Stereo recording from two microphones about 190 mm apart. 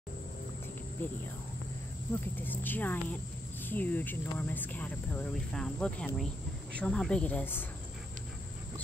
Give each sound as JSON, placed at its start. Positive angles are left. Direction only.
{"t": 2.1, "sound": "speech", "side_deg": 10}